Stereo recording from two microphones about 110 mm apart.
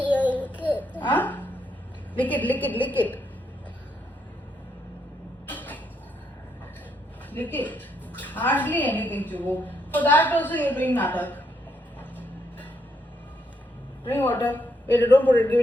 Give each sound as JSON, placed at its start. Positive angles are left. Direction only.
{"t": 0.1, "sound": "a sound", "side_deg": 15}
{"t": 2.1, "sound": "a woman's voice", "side_deg": 15}
{"t": 5.5, "sound": "a sound", "side_deg": 15}
{"t": 7.3, "sound": "a woman's voice", "side_deg": 15}
{"t": 11.9, "sound": "vehicle", "side_deg": 15}
{"t": 14.1, "sound": "a woman's voice", "side_deg": 15}